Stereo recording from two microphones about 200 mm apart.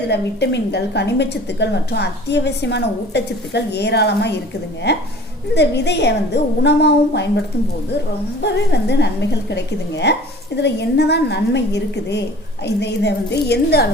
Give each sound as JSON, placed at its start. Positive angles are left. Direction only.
{"t": 0.1, "sound": "a woman's voice", "side_deg": 60}